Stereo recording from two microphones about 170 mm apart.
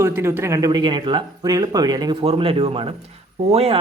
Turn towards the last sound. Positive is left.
turn(degrees=-35)  # may be behind; listen again after turning